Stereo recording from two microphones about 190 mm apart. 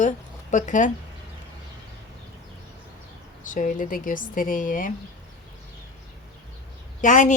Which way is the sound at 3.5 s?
45° left (ahead or behind).